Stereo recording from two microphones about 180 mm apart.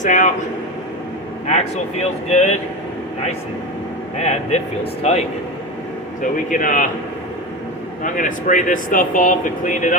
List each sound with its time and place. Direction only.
0.0 s speech: 45° left (ahead or behind)
1.5 s speech: 35° left (ahead or behind)
4.2 s speech: 40° left (ahead or behind)
6.2 s speech: 45° left (ahead or behind)
8.0 s speech: 45° left (ahead or behind)